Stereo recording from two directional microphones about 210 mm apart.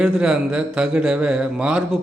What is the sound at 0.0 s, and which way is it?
A man's voice, 5° right (ahead or behind).